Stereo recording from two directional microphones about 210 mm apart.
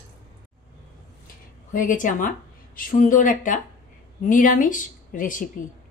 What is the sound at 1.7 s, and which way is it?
A woman's voice, 40° left (ahead or behind).